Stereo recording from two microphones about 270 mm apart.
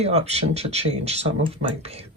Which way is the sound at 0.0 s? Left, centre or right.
Right.